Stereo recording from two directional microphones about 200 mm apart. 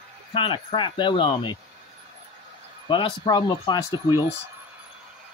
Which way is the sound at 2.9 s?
25° left (ahead or behind).